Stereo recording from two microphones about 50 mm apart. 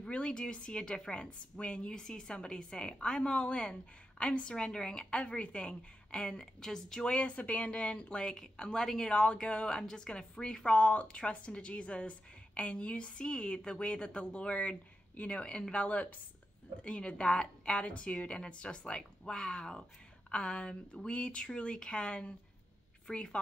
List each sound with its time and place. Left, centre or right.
0.1 s a woman's voice: centre
9.1 s a woman's voice: left
10.8 s a woman's voice: left